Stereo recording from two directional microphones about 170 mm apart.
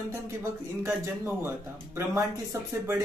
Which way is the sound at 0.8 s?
15° right (ahead or behind).